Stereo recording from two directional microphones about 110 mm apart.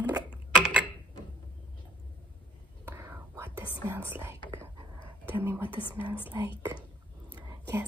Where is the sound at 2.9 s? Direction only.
25° right (ahead or behind).